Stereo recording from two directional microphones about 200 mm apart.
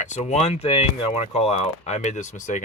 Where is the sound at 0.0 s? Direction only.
35° left (ahead or behind).